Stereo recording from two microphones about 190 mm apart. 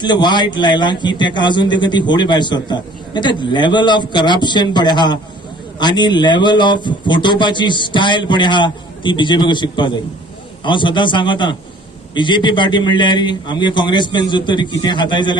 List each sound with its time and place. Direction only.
0.0 s a man's voice: 25° left (ahead or behind)